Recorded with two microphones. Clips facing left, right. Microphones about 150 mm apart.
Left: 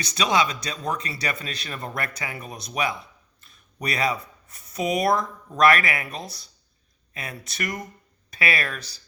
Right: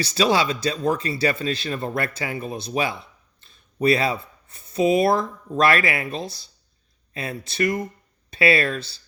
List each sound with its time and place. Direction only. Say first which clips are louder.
0.0 s speech: right 3 dB; 30° right (ahead or behind)